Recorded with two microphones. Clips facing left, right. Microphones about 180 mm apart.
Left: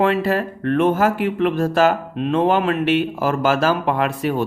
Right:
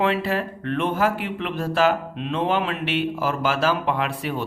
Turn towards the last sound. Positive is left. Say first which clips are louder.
# left 6 dB
turn(degrees=45)  # may be behind; listen again after turning